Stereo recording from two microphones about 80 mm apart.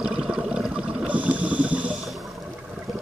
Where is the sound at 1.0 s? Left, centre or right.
Centre.